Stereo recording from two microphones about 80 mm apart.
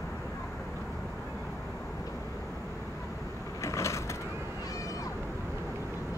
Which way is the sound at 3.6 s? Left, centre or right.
Left.